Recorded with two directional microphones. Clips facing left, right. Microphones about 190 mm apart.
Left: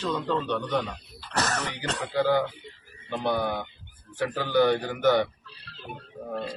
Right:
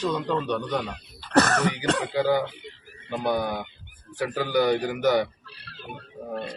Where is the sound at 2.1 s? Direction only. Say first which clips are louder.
Left 4 dB; 15° right (ahead or behind).